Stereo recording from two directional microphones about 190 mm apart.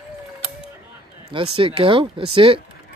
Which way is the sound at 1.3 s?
30° right (ahead or behind).